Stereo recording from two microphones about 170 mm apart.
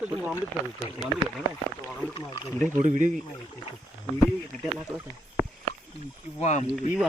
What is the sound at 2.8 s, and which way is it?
Speech, 50° right (ahead or behind).